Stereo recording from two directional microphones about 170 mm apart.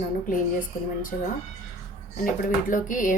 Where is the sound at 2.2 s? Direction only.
50° left (ahead or behind).